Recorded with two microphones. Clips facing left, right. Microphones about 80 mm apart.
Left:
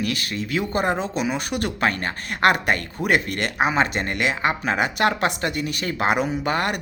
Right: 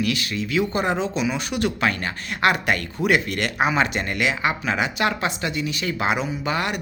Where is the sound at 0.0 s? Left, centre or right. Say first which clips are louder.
Right 2 dB; left.